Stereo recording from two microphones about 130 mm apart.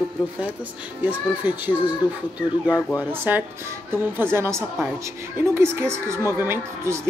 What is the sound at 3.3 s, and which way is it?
Speech, 15° right (ahead or behind).